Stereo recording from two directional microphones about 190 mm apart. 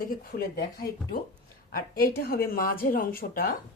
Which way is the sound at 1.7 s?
55° left (ahead or behind).